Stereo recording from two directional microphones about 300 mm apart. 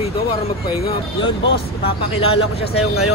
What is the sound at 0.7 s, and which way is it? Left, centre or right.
Speech, centre.